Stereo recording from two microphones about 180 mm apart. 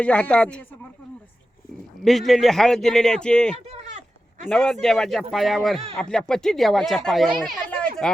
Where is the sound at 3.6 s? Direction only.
35° right (ahead or behind).